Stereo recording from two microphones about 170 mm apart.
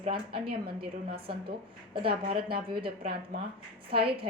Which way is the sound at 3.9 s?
30° right (ahead or behind).